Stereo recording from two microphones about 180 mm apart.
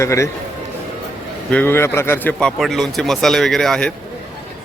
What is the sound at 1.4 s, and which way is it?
A man's voice, 10° left (ahead or behind).